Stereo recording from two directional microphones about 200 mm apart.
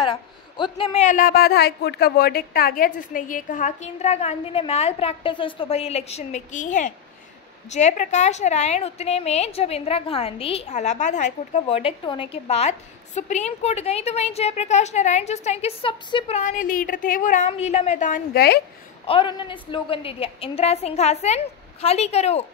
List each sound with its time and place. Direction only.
0.0 s a woman's voice: 25° left (ahead or behind); by 18.6 s 50° left (ahead or behind)
19.0 s a woman's voice: 25° left (ahead or behind)